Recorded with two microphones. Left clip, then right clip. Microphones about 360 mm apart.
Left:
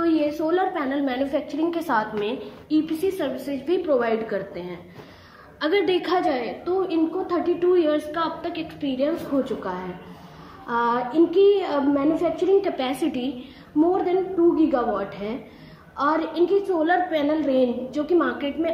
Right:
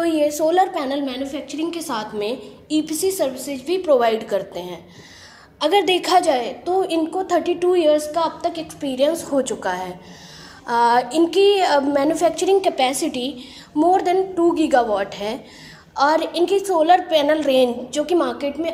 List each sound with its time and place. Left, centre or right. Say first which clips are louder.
0.0 s a sound: right 4 dB; right
0.7 s a woman's voice: right 2 dB; centre
1.1 s a woman's voice: left 2 dB; centre; by 12.9 s right
13.9 s a woman's voice: right 4 dB; right